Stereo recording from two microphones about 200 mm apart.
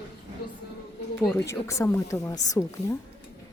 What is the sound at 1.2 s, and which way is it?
Speech, 15° left (ahead or behind).